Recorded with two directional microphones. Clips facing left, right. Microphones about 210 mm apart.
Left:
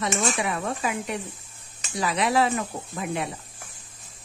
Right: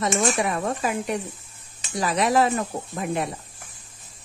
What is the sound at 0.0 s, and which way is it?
Speech, 40° right (ahead or behind).